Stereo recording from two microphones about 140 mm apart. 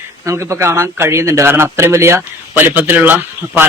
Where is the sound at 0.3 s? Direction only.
20° right (ahead or behind).